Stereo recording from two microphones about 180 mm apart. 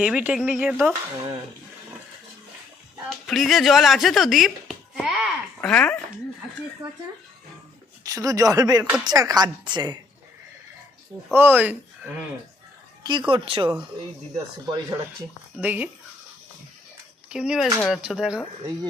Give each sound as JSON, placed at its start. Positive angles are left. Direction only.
{"t": 0.0, "sound": "speech", "side_deg": -5}
{"t": 3.2, "sound": "speech", "side_deg": 0}
{"t": 5.7, "sound": "speech", "side_deg": 5}
{"t": 8.0, "sound": "a woman's voice", "side_deg": -20}
{"t": 11.3, "sound": "speech", "side_deg": -10}
{"t": 13.1, "sound": "a woman's voice", "side_deg": -25}
{"t": 15.5, "sound": "speech", "side_deg": -10}
{"t": 17.2, "sound": "speech", "side_deg": -5}